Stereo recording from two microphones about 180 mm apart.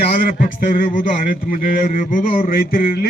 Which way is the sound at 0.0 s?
55° left (ahead or behind).